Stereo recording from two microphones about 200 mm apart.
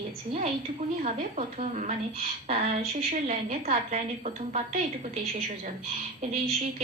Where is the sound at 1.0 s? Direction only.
35° right (ahead or behind).